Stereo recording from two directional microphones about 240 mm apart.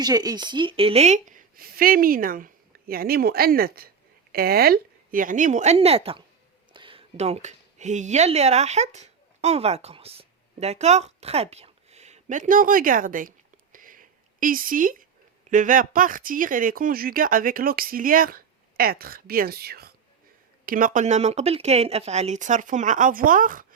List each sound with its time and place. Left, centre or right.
0.0 s speech: centre; by 13.3 s right
13.7 s a sound: right
15.4 s speech: right